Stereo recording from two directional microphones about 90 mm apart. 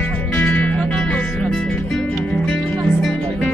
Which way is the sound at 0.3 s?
20° left (ahead or behind).